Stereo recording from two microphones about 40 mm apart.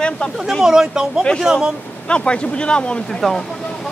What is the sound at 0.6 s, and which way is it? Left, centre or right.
Speech, centre.